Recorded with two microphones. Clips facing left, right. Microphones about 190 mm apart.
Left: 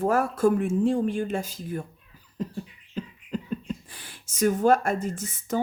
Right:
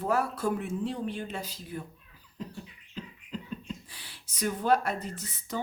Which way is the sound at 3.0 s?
50° left (ahead or behind).